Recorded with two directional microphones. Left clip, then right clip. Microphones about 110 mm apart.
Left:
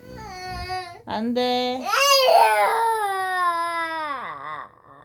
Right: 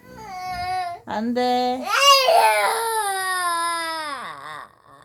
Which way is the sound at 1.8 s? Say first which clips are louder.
Right 2 dB; 20° left (ahead or behind).